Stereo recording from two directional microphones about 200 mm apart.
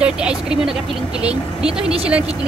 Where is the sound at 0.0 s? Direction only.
5° right (ahead or behind).